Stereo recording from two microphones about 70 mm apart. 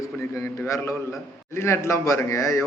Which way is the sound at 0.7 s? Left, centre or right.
Left.